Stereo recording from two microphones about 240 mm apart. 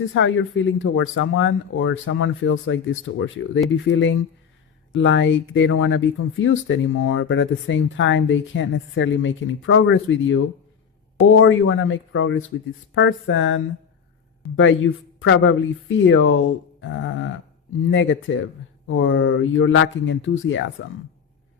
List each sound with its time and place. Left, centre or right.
0.0 s speech: left